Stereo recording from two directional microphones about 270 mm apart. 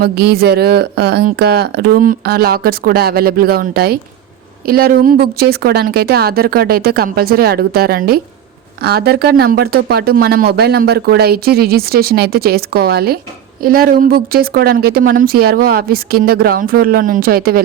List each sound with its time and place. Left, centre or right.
0.0 s speech: right